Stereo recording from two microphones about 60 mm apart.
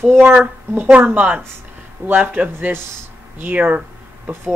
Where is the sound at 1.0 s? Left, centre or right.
Right.